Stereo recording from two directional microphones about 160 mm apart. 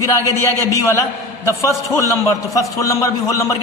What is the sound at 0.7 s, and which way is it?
A man's voice, 20° left (ahead or behind).